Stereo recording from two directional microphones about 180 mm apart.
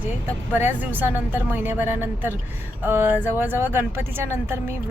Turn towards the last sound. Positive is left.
turn(degrees=-15)  # may be behind; listen again after turning